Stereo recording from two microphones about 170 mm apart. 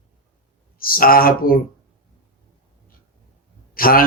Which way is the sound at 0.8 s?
60° left (ahead or behind).